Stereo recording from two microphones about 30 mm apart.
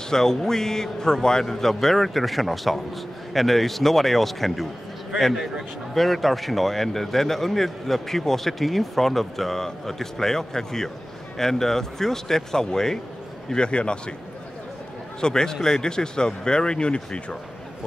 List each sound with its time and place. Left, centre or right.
0.1 s a man's voice: centre
5.9 s a man's voice: centre
13.5 s a man's voice: left
15.1 s speech: left